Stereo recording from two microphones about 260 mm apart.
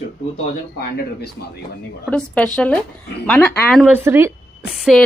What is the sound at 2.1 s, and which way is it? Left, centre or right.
Speech, centre.